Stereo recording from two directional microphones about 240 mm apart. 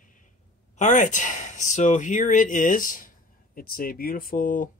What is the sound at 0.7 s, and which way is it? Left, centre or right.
Speech, left.